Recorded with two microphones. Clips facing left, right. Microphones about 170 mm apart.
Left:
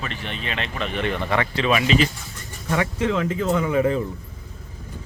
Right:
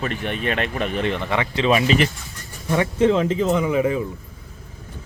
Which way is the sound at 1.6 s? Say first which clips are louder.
Right 3 dB; 30° right (ahead or behind).